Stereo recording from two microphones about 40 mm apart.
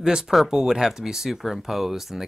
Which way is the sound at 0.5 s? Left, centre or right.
Centre.